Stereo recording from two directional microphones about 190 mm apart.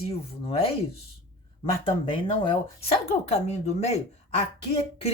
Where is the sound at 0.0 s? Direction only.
30° left (ahead or behind).